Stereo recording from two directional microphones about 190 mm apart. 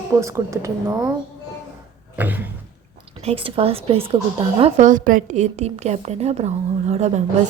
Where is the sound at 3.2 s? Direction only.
30° right (ahead or behind).